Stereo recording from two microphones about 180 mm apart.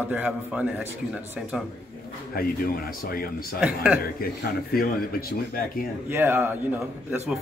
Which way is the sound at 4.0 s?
60° left (ahead or behind).